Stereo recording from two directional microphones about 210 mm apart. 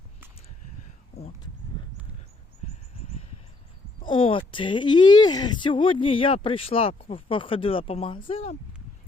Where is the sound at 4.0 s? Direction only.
25° left (ahead or behind).